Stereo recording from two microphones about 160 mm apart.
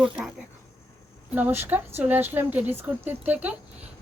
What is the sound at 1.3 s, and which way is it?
A woman's voice, 10° right (ahead or behind).